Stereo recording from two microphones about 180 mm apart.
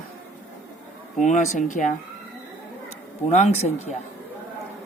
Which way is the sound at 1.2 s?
45° left (ahead or behind).